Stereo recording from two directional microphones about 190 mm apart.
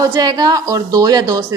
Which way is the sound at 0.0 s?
20° right (ahead or behind).